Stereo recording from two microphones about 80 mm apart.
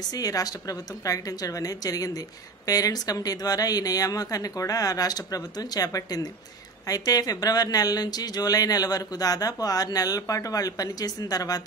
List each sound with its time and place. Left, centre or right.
0.1 s a woman's voice: left